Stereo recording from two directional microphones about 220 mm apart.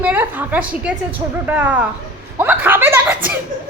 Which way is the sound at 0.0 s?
10° right (ahead or behind).